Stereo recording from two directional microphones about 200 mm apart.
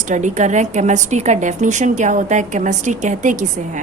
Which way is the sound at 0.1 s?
35° right (ahead or behind).